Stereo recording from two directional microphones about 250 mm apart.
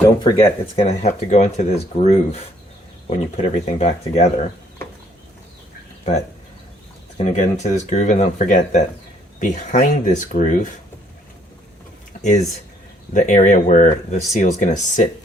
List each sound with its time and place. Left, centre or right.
0.2 s speech: centre
7.2 s speech: left
12.2 s speech: left